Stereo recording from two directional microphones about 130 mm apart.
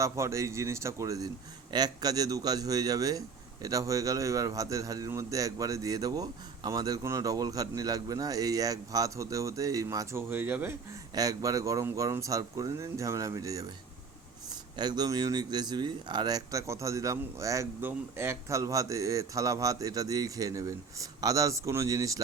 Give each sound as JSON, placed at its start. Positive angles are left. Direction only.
{"t": 0.0, "sound": "speech", "side_deg": -20}
{"t": 11.1, "sound": "speech", "side_deg": -30}